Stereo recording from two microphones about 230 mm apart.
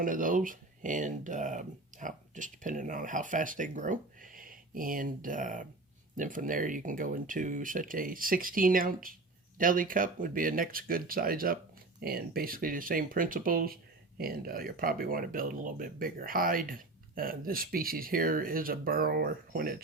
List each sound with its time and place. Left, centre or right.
0.0 s speech: right